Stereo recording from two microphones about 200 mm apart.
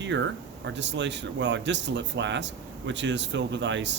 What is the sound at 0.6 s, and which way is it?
Speech, 60° right (ahead or behind).